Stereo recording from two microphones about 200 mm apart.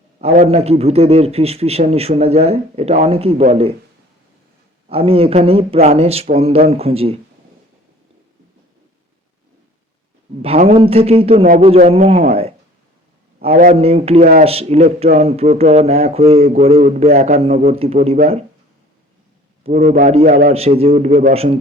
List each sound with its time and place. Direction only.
0.2 s a man's voice: 30° right (ahead or behind)
4.9 s speech: 30° right (ahead or behind)
10.4 s speech: 30° right (ahead or behind)
11.4 s a man's voice: 40° right (ahead or behind)
13.4 s a man's voice: 45° right (ahead or behind)
13.7 s a man's voice: 30° right (ahead or behind)
19.6 s a man's voice: 30° right (ahead or behind)